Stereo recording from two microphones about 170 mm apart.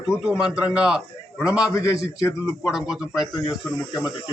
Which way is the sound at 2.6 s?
Centre (ahead or behind).